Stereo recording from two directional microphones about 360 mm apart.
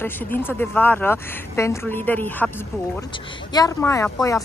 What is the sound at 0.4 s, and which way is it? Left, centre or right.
Speech, centre.